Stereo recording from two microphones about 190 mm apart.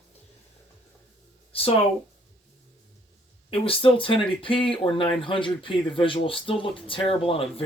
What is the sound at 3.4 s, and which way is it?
Speech, 30° left (ahead or behind).